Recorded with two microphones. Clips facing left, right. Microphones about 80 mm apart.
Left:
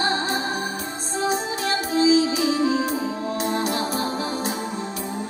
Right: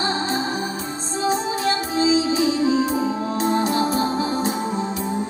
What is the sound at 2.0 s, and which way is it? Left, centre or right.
Music, right.